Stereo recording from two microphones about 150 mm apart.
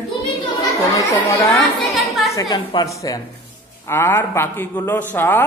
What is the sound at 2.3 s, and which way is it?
A man's voice, 30° left (ahead or behind).